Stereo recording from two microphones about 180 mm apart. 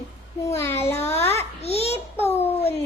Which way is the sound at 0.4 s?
15° left (ahead or behind).